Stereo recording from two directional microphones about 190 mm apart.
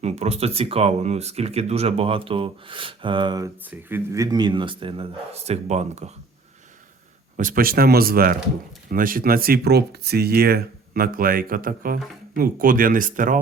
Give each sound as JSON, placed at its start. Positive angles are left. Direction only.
{"t": 0.0, "sound": "speech", "side_deg": -35}
{"t": 3.7, "sound": "speech", "side_deg": -10}
{"t": 7.3, "sound": "speech", "side_deg": -45}